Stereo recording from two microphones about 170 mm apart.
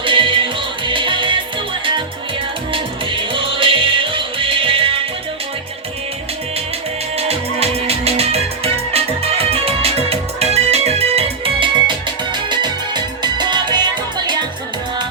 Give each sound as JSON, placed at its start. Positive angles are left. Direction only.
{"t": 0.0, "sound": "music", "side_deg": -30}
{"t": 2.7, "sound": "music", "side_deg": -30}
{"t": 7.2, "sound": "music", "side_deg": -35}